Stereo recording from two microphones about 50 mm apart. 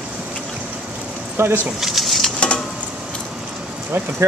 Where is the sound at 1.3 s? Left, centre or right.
Right.